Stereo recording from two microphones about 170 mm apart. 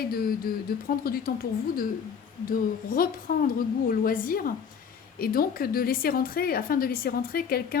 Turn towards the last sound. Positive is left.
turn(degrees=60)  # may be behind; listen again after turning